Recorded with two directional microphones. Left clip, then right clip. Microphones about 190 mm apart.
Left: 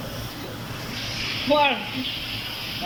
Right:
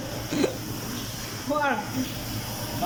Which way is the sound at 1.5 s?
Centre (ahead or behind).